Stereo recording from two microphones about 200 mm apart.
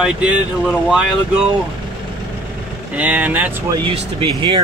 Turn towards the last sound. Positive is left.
turn(degrees=-25)  # may be behind; listen again after turning